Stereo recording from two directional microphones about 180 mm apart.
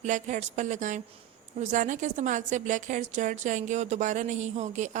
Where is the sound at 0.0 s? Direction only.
40° right (ahead or behind).